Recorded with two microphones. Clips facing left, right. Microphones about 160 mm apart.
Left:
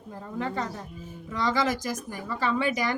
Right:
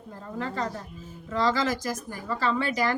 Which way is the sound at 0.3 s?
20° left (ahead or behind).